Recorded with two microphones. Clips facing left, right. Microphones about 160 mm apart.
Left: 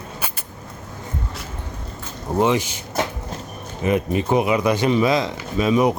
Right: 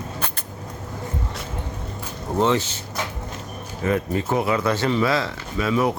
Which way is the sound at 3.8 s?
20° left (ahead or behind).